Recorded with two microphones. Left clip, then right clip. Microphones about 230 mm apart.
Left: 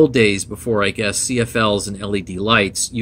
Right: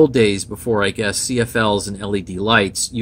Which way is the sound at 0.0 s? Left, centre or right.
Centre.